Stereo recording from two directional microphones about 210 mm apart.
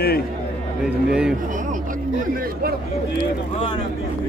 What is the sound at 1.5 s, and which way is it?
Speech, 40° right (ahead or behind).